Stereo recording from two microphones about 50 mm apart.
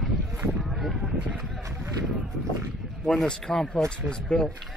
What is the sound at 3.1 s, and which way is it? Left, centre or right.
Speech, centre.